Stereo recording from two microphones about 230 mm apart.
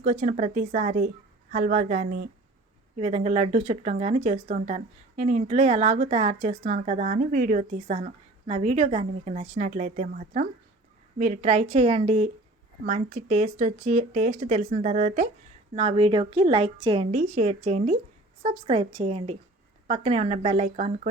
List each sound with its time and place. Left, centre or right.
0.0 s speech: right